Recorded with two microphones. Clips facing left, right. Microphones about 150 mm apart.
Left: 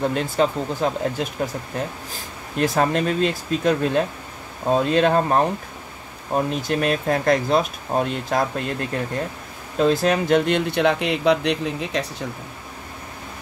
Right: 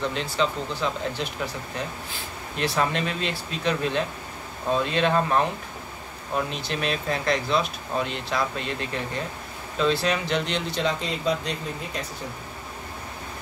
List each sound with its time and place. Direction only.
0.0 s speech: 50° left (ahead or behind)
9.8 s speech: 45° left (ahead or behind); by 12.0 s 90° left